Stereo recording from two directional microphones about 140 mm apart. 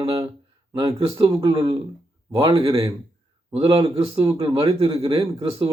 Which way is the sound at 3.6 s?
25° right (ahead or behind).